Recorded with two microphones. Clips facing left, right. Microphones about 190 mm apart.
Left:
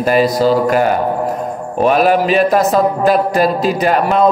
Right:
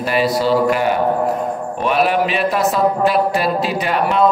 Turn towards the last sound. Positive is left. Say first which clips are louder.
# left 4 dB
turn(degrees=45)  # may be behind; listen again after turning